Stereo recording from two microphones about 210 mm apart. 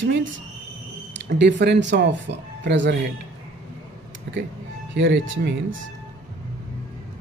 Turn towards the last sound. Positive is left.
turn(degrees=-65)  # may be behind; listen again after turning